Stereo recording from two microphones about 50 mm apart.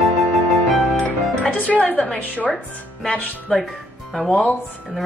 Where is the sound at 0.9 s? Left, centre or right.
Left.